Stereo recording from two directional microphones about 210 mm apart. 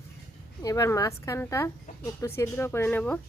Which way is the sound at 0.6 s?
15° left (ahead or behind).